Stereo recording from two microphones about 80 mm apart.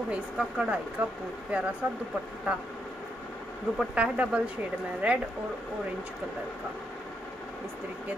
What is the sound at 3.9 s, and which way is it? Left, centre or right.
Speech, centre.